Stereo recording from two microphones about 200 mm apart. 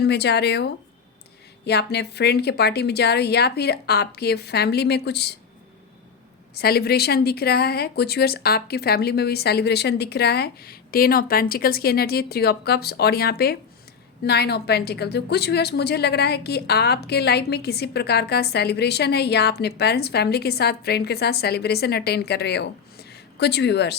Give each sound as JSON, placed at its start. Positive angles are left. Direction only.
{"t": 0.0, "sound": "a woman's voice", "side_deg": 55}
{"t": 6.5, "sound": "a woman's voice", "side_deg": 50}